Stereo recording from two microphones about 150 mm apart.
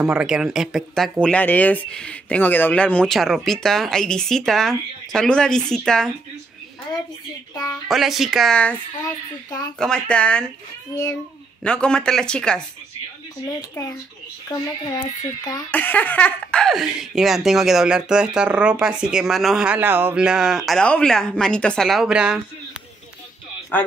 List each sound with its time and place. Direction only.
0.0 s speech: 5° right (ahead or behind)
1.2 s speech: 10° left (ahead or behind)
7.9 s speech: centre (ahead or behind)
9.8 s speech: 5° left (ahead or behind)
10.9 s speech: 25° left (ahead or behind)
11.6 s speech: 5° left (ahead or behind)
13.6 s speech: 25° left (ahead or behind)
15.7 s speech: 10° left (ahead or behind); by 22.4 s 5° right (ahead or behind)
23.7 s speech: 10° left (ahead or behind)